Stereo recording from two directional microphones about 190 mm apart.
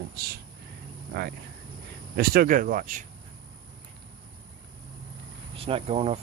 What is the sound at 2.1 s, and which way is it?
Speech, 50° right (ahead or behind).